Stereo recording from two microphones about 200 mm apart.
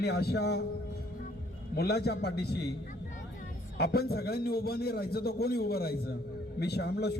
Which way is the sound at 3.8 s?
50° left (ahead or behind).